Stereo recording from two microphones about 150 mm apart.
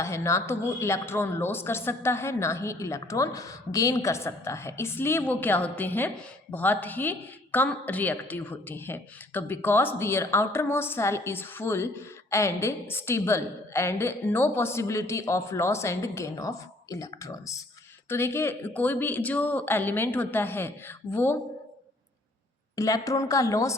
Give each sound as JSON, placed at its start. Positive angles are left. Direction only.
{"t": 0.0, "sound": "a woman's voice", "side_deg": 20}
{"t": 22.7, "sound": "a woman's voice", "side_deg": 25}